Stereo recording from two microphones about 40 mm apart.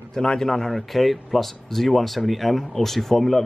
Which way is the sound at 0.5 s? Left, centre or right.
Centre.